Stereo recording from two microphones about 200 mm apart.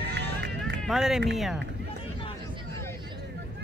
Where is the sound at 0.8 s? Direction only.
Centre (ahead or behind).